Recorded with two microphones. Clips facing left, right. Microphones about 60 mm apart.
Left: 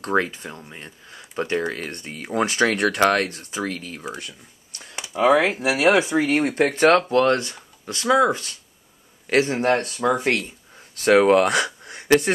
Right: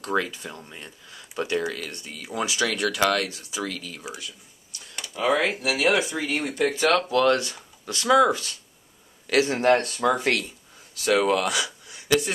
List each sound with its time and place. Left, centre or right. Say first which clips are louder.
0.0 s speech: left 4 dB; left
0.5 s speech: left 2 dB; centre
0.7 s speech: left 2 dB; left
4.1 s speech: left 4 dB; left
4.9 s a sound: left 6 dB; centre
5.2 s speech: left 5 dB; left
6.6 s speech: left 4 dB; left
9.8 s speech: left 2 dB; centre
11.0 s speech: left 6 dB; left